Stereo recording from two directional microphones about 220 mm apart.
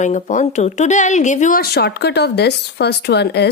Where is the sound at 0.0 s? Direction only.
35° left (ahead or behind).